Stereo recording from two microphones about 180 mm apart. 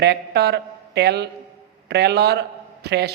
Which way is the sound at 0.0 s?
65° right (ahead or behind).